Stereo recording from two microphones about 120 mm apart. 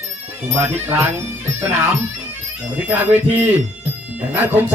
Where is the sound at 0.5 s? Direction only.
15° right (ahead or behind).